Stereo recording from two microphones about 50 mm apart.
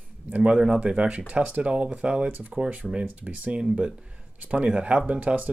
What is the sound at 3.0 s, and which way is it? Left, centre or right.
Speech, right.